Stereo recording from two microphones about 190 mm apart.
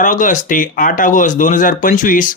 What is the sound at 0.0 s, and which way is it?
Speech, 40° left (ahead or behind).